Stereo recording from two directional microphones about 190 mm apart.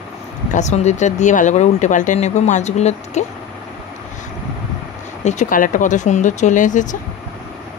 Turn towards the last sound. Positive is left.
turn(degrees=40)  # may be behind; listen again after turning